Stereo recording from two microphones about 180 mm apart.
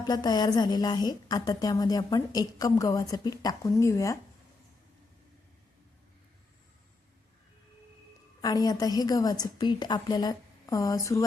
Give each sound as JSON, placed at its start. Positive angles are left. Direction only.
{"t": 0.1, "sound": "a woman's voice", "side_deg": 20}
{"t": 8.4, "sound": "a woman's voice", "side_deg": 20}